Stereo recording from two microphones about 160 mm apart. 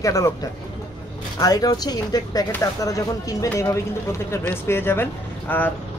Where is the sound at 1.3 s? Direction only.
25° left (ahead or behind).